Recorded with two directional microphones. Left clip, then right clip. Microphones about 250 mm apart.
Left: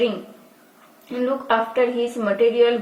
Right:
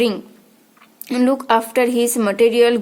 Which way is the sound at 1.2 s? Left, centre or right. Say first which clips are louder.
Right 4 dB; right.